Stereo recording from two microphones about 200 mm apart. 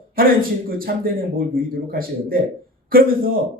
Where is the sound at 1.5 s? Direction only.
45° right (ahead or behind).